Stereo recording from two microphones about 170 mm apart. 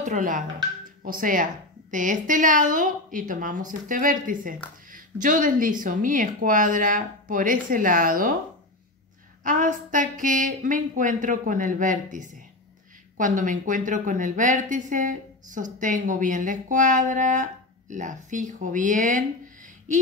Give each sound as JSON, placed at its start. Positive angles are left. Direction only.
{"t": 0.0, "sound": "speech", "side_deg": -50}
{"t": 9.4, "sound": "speech", "side_deg": -50}